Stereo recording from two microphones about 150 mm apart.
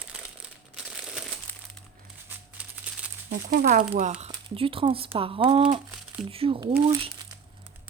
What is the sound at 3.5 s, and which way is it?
Speech, 75° right (ahead or behind).